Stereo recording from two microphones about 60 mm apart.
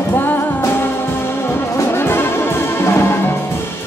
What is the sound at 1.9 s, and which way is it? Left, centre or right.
Music, left.